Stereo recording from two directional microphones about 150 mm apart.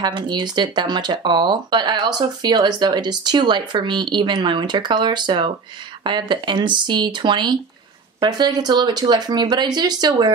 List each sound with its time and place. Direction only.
0.0 s speech: 30° right (ahead or behind)